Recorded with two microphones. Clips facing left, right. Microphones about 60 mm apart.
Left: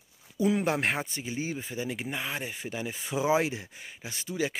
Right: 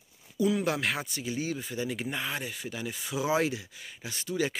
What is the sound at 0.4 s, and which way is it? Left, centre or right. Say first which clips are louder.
Speech: left 1 dB; left.